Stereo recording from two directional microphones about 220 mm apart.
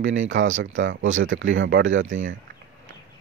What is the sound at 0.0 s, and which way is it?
Speech, 60° right (ahead or behind).